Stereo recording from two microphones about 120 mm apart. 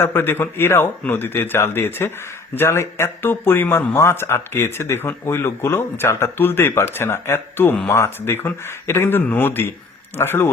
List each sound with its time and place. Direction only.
0.0 s speech: 20° left (ahead or behind)